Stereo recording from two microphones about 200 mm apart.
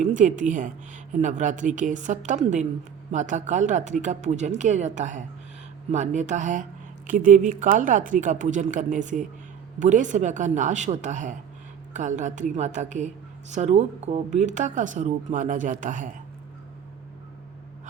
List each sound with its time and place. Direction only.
0.0 s speech: 40° right (ahead or behind)